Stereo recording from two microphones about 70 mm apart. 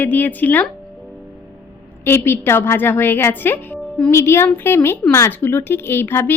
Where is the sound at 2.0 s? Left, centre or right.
Left.